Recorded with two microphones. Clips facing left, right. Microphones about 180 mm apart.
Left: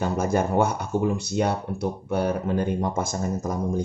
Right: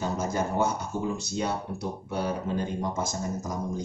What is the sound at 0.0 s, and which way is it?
A man's voice, 55° left (ahead or behind).